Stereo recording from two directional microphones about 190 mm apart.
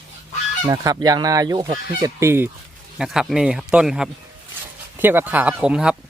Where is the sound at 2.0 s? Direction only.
15° right (ahead or behind).